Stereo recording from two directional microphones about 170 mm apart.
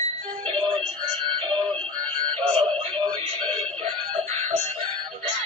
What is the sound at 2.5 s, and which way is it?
Synthetic singing, 30° right (ahead or behind).